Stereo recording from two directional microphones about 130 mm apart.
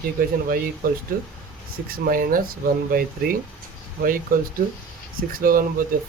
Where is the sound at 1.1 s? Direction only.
90° right.